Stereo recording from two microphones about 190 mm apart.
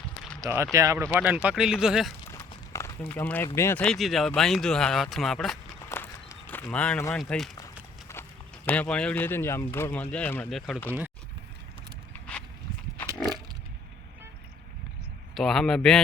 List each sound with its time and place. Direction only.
0.4 s speech: 15° right (ahead or behind)
2.3 s speech: 15° left (ahead or behind)
3.9 s speech: centre (ahead or behind)
5.9 s walk: 10° left (ahead or behind)
7.2 s speech: centre (ahead or behind)
8.1 s a sound: 15° left (ahead or behind)
8.6 s speech: 5° left (ahead or behind)
15.4 s speech: centre (ahead or behind)